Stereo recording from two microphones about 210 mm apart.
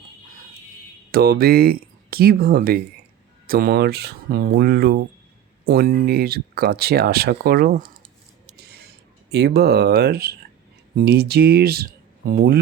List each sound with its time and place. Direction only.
1.1 s speech: 50° right (ahead or behind)
8.5 s a sound: 50° right (ahead or behind)
9.3 s speech: 50° right (ahead or behind)